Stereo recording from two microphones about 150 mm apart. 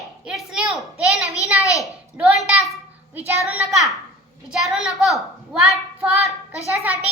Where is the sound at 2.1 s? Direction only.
5° right (ahead or behind).